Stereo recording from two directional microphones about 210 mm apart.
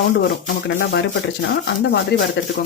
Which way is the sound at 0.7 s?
55° left (ahead or behind).